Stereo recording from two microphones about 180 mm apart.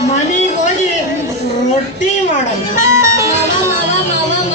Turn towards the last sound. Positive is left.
turn(degrees=-15)  # may be behind; listen again after turning